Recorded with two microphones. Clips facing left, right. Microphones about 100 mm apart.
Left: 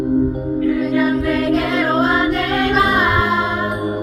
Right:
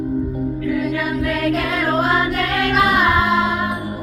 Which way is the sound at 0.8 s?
25° left (ahead or behind).